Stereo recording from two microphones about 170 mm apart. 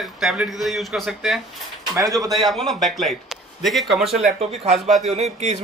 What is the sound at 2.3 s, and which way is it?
A man's voice, centre (ahead or behind).